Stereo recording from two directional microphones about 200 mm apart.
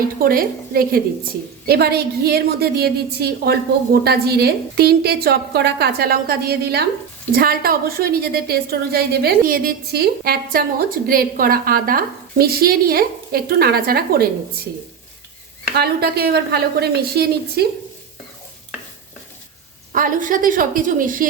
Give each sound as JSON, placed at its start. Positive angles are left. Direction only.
{"t": 0.2, "sound": "a woman's voice", "side_deg": -45}
{"t": 15.7, "sound": "a woman's voice", "side_deg": -50}
{"t": 19.9, "sound": "a woman's voice", "side_deg": -45}